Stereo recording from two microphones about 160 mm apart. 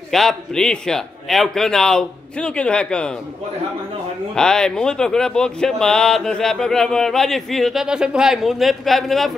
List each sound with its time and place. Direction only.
0.1 s speech: centre (ahead or behind)
4.4 s speech: 5° left (ahead or behind)